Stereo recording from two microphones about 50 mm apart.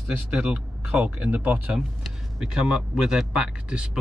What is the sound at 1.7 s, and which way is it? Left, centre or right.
Speech, centre.